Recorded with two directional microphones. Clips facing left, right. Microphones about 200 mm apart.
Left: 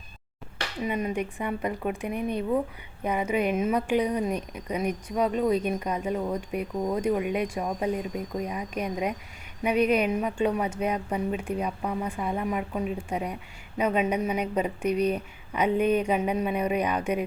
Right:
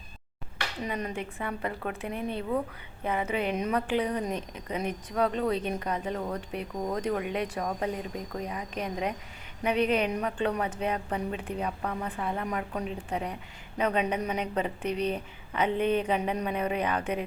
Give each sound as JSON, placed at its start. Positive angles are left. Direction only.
{"t": 0.9, "sound": "a woman's voice", "side_deg": 10}